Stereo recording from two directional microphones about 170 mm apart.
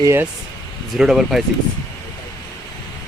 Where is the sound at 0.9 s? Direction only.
Centre (ahead or behind).